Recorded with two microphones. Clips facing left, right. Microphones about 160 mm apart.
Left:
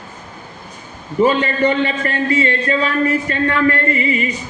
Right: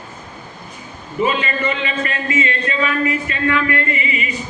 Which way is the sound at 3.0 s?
40° left (ahead or behind).